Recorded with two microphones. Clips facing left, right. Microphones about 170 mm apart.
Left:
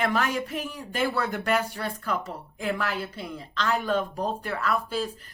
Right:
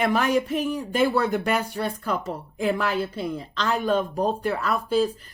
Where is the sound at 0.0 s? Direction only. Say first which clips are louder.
Right 5 dB; 15° right (ahead or behind).